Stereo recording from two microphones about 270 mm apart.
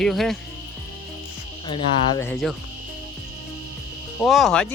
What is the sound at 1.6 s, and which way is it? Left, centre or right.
Frog, centre.